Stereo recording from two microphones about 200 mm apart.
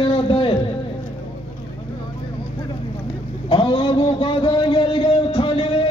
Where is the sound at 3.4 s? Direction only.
25° left (ahead or behind).